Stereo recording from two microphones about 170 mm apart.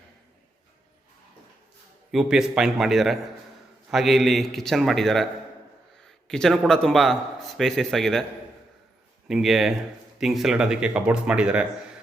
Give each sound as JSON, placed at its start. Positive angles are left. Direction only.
{"t": 2.1, "sound": "a man's voice", "side_deg": -5}
{"t": 6.1, "sound": "a sound", "side_deg": 5}
{"t": 6.7, "sound": "a man's voice", "side_deg": 5}
{"t": 9.2, "sound": "a man's voice", "side_deg": 0}